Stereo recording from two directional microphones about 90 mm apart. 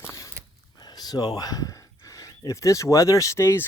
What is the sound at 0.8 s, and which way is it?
Speech, 50° left (ahead or behind).